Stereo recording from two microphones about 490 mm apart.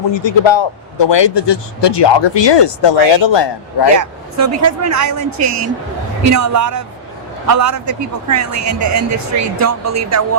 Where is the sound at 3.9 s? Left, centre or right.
Right.